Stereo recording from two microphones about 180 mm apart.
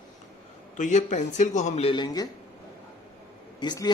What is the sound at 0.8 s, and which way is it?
A man's voice, 40° left (ahead or behind).